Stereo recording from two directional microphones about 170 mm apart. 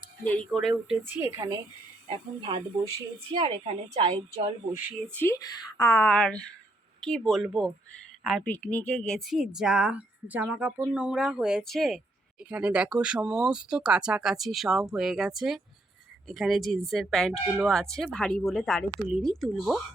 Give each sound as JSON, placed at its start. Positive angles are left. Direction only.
{"t": 0.3, "sound": "speech", "side_deg": 0}
{"t": 1.0, "sound": "a woman's voice", "side_deg": -15}
{"t": 2.0, "sound": "a woman's voice", "side_deg": -30}
{"t": 4.9, "sound": "speech", "side_deg": 5}
{"t": 5.3, "sound": "speech", "side_deg": 20}